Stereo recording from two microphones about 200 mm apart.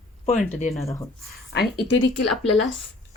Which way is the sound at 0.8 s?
15° left (ahead or behind).